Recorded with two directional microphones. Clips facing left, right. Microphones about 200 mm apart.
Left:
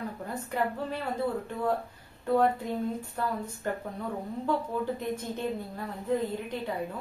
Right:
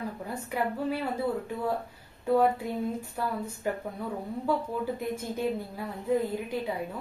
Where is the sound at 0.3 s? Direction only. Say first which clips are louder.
Even; 10° right (ahead or behind).